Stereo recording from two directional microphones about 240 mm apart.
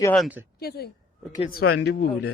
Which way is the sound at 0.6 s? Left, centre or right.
Left.